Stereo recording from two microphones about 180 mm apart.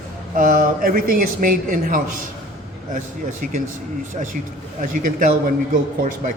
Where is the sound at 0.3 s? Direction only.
45° right (ahead or behind).